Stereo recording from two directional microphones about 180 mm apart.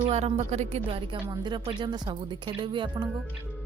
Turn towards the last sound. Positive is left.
turn(degrees=-25)  # may be behind; listen again after turning